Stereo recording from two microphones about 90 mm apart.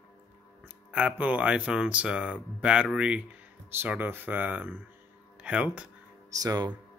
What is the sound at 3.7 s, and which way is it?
Speech, 20° right (ahead or behind).